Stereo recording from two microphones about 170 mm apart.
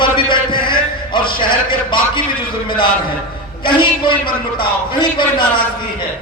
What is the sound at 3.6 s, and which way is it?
A man's voice, 30° left (ahead or behind).